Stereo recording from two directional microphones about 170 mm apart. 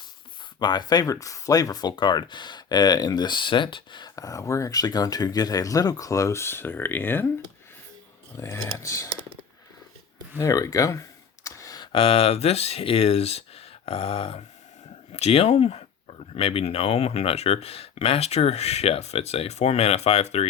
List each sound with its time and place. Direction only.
0.6 s speech: 25° left (ahead or behind)
8.4 s speech: 20° left (ahead or behind)
10.3 s speech: 20° left (ahead or behind); by 20.5 s 40° left (ahead or behind)